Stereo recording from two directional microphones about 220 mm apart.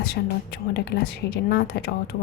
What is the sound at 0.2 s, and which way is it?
A woman's voice, 45° left (ahead or behind).